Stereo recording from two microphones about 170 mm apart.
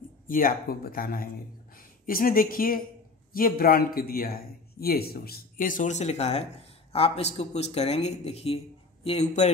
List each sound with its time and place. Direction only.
0.3 s a man's voice: 55° left (ahead or behind)